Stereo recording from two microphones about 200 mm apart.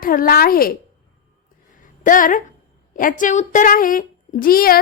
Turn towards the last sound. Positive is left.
turn(degrees=45)  # may be behind; listen again after turning